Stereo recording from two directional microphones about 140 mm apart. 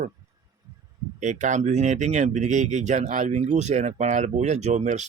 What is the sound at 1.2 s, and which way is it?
Speech, 60° right (ahead or behind).